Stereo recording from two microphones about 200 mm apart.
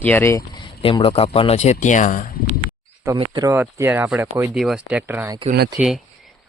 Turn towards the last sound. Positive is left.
turn(degrees=0)  # may be behind; listen again after turning